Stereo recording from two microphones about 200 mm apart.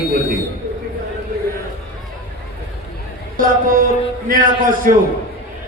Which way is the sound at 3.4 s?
45° right (ahead or behind).